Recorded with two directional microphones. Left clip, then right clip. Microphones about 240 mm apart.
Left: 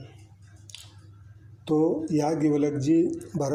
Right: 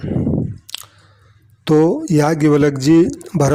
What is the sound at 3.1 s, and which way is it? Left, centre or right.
Speech, right.